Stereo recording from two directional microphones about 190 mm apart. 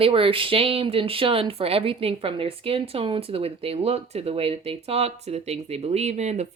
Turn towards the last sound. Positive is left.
turn(degrees=-35)  # may be behind; listen again after turning